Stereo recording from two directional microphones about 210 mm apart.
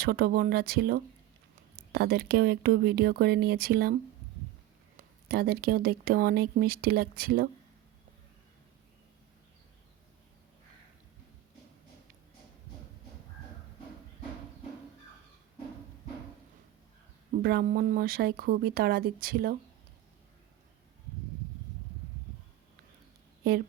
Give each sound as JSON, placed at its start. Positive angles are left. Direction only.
{"t": 0.0, "sound": "speech", "side_deg": -45}
{"t": 4.9, "sound": "speech", "side_deg": -45}
{"t": 17.3, "sound": "speech", "side_deg": -45}